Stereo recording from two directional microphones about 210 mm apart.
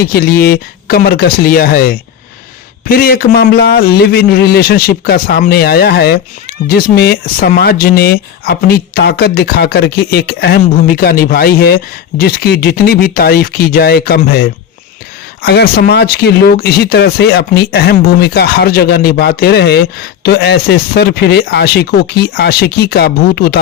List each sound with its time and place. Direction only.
0.0 s a man's voice: 45° left (ahead or behind)